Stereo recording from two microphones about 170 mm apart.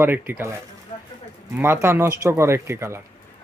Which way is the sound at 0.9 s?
40° left (ahead or behind).